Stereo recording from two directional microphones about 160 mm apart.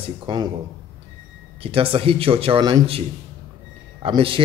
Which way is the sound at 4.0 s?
35° right (ahead or behind).